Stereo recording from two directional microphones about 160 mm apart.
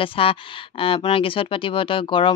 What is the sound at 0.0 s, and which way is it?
Speech, 35° left (ahead or behind).